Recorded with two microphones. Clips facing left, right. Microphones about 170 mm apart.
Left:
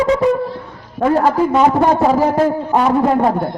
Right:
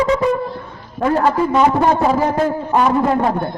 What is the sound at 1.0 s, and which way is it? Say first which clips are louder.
A man's voice: left 2 dB; 10° left (ahead or behind).